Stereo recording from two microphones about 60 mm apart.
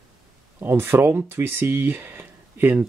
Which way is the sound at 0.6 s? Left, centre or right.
Right.